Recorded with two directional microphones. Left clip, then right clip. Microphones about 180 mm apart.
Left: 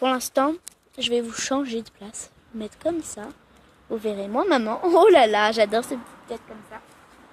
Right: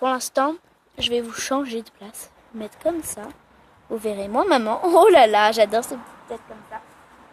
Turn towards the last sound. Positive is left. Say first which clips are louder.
# right 2 dB
turn(degrees=55)  # may be behind; listen again after turning